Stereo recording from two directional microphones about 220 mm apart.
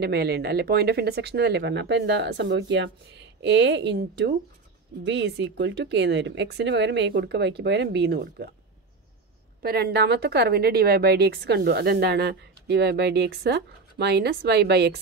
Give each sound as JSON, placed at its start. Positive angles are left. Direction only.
{"t": 0.0, "sound": "speech", "side_deg": -50}
{"t": 9.6, "sound": "speech", "side_deg": -45}